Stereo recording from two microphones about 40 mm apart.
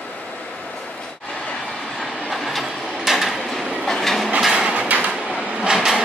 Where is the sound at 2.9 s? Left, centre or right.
Centre.